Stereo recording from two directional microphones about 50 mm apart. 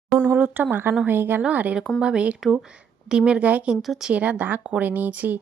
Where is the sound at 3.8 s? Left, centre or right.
Centre.